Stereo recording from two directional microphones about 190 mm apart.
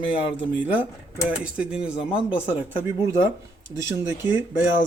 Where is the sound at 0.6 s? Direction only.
10° right (ahead or behind).